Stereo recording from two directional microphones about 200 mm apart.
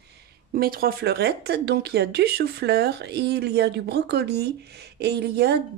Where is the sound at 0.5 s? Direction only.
45° right (ahead or behind).